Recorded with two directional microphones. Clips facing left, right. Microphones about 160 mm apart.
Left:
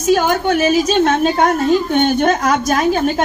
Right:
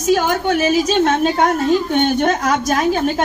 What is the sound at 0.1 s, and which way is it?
A woman's voice, 50° left (ahead or behind).